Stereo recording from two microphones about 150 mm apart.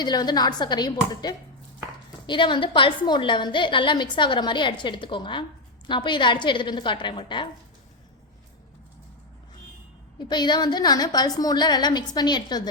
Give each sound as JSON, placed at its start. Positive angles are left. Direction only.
{"t": 0.0, "sound": "a woman's voice", "side_deg": 25}
{"t": 10.2, "sound": "a woman's voice", "side_deg": 30}